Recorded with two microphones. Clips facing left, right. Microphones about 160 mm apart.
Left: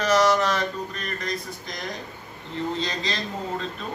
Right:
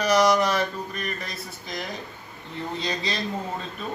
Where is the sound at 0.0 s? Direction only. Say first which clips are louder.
Even; 15° right (ahead or behind).